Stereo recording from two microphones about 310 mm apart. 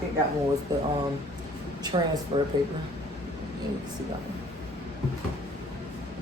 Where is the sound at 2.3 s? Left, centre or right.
Centre.